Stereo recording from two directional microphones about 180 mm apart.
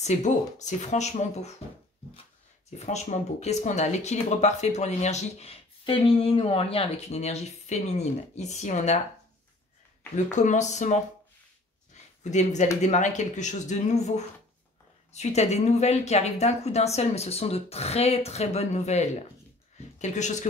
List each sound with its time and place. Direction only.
0.0 s speech: 40° left (ahead or behind)
2.8 s speech: 40° left (ahead or behind)
10.1 s speech: 45° left (ahead or behind)
11.9 s a sound: 40° left (ahead or behind)
12.8 s speech: 40° left (ahead or behind)